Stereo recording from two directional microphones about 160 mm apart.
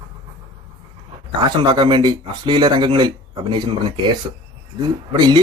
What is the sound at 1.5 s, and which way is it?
Speech, 25° right (ahead or behind).